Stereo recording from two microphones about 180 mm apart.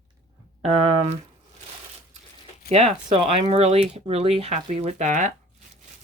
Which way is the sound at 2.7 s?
35° right (ahead or behind).